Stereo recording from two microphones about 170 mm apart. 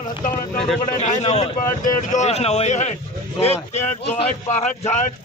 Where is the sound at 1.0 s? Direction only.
40° left (ahead or behind).